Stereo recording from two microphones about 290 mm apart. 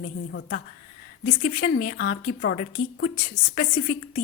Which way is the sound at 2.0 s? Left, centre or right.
Left.